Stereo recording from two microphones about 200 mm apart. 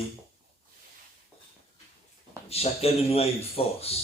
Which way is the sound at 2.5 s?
30° left (ahead or behind).